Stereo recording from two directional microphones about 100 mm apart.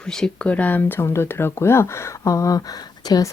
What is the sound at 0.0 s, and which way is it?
Speech, 5° left (ahead or behind).